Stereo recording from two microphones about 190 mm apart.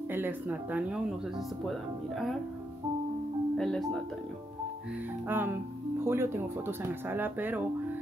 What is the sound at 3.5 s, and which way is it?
Speech, centre (ahead or behind).